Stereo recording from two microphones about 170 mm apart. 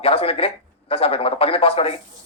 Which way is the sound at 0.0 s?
35° left (ahead or behind).